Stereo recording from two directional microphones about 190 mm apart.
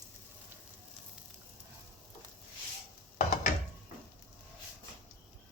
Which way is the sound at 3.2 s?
40° left (ahead or behind).